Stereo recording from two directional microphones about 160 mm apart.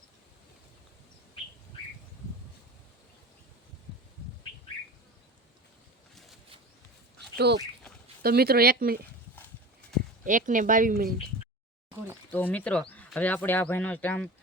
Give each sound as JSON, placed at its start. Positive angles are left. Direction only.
{"t": 7.2, "sound": "dog", "side_deg": -90}
{"t": 8.2, "sound": "speech", "side_deg": -75}
{"t": 10.2, "sound": "speech", "side_deg": -55}
{"t": 12.3, "sound": "speech", "side_deg": 10}